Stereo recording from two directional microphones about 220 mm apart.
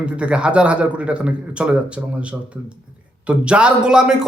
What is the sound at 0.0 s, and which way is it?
A man's voice, 5° right (ahead or behind).